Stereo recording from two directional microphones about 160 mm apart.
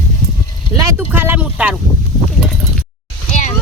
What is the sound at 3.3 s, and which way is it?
Music, 50° left (ahead or behind).